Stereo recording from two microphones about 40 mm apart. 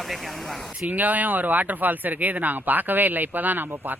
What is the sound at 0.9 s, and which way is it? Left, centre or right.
Speech, right.